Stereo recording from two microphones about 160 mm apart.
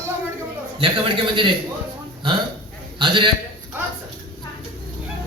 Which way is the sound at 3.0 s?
30° right (ahead or behind).